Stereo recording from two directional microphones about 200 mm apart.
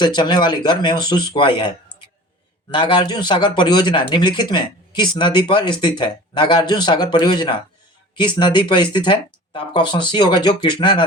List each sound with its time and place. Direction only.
0.0 s speech: 20° left (ahead or behind)